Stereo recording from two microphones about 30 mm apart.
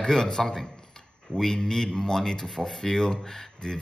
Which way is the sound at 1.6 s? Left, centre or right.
Left.